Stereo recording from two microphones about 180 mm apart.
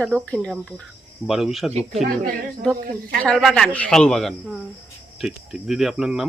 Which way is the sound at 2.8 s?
55° right (ahead or behind).